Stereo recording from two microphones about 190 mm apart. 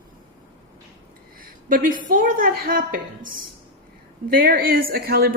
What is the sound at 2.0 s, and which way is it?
A woman's voice, 45° right (ahead or behind).